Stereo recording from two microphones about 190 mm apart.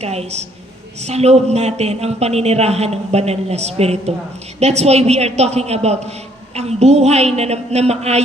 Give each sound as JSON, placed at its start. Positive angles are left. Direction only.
{"t": 0.0, "sound": "a man's voice", "side_deg": -35}